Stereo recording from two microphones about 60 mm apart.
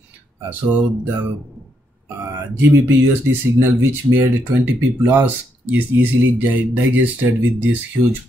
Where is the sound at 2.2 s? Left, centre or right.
Right.